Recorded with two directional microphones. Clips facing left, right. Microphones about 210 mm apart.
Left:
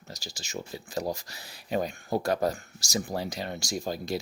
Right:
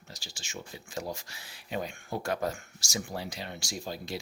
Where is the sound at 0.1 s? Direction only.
40° left (ahead or behind).